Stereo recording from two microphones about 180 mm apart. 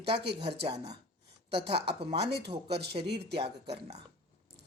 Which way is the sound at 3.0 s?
65° right (ahead or behind).